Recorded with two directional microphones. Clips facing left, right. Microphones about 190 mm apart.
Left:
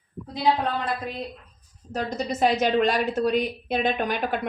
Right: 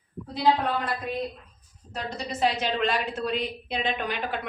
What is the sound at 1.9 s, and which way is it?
Speech, 45° left (ahead or behind).